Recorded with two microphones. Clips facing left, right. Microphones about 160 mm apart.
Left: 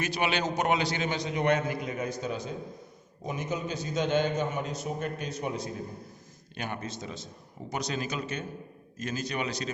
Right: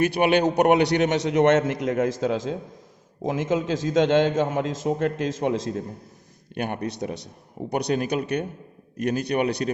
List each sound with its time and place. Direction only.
0.0 s a man's voice: 55° right (ahead or behind); by 5.8 s 90° right
6.5 s speech: 55° right (ahead or behind)
6.8 s a man's voice: 65° right (ahead or behind)